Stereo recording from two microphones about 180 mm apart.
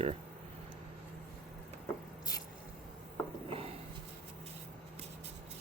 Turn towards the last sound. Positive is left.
turn(degrees=-30)  # may be behind; listen again after turning